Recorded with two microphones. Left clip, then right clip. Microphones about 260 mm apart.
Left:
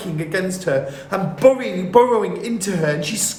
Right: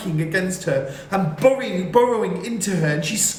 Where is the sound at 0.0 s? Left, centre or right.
Centre.